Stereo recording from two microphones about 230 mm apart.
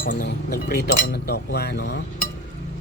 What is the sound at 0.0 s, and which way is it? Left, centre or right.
Speech, left.